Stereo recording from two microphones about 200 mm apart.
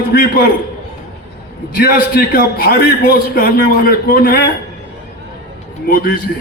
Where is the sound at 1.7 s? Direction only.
50° left (ahead or behind).